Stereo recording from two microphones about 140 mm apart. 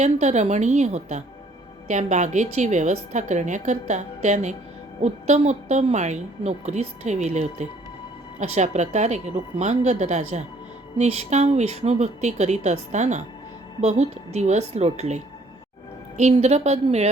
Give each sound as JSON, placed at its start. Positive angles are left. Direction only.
{"t": 0.0, "sound": "a woman's voice", "side_deg": -55}